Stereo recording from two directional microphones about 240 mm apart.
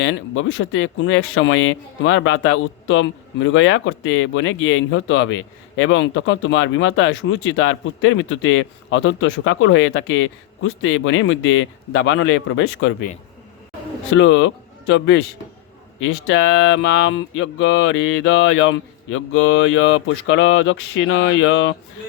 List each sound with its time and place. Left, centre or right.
0.0 s a man's voice: left
14.1 s a man's voice: left